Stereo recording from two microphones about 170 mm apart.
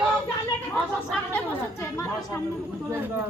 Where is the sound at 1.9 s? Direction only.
15° left (ahead or behind).